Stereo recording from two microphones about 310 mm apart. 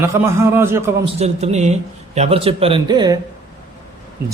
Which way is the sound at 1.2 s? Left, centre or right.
Right.